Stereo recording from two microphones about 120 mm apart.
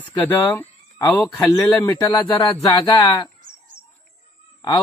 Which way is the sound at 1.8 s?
35° left (ahead or behind).